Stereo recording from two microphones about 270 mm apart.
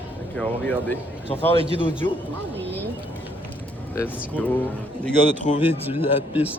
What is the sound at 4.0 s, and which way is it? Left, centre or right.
Speech, centre.